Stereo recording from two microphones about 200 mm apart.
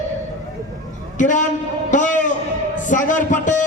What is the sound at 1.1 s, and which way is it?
A man's voice, 40° left (ahead or behind).